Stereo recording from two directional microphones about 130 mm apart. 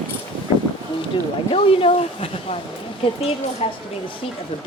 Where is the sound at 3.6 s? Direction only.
50° left (ahead or behind).